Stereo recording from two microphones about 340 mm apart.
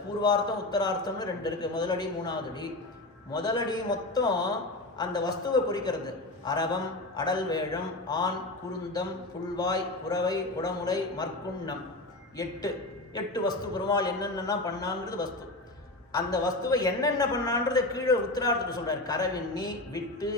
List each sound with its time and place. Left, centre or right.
0.2 s a man's voice: centre
9.6 s a man's voice: centre
13.1 s a man's voice: centre